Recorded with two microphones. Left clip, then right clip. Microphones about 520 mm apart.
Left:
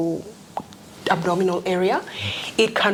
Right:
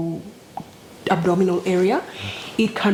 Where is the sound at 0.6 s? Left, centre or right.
Left.